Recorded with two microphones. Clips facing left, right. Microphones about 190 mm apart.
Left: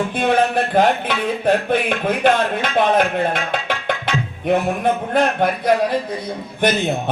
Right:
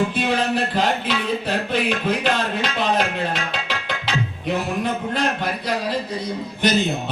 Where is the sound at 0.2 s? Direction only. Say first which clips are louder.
Left 4 dB; 55° left (ahead or behind).